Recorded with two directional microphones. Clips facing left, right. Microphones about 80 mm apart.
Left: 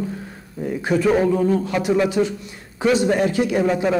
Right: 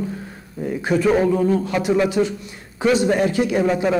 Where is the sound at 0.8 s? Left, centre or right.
Centre.